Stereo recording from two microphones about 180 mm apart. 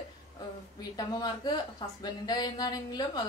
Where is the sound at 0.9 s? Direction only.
25° left (ahead or behind).